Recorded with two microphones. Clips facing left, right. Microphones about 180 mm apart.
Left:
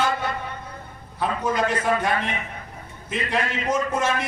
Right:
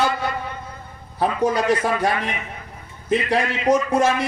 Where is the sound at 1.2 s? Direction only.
35° right (ahead or behind).